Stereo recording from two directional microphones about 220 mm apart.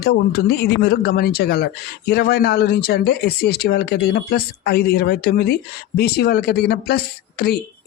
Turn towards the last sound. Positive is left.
turn(degrees=45)  # may be behind; listen again after turning